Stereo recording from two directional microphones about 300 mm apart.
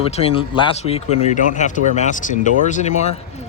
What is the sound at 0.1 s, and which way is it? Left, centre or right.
Speech, centre.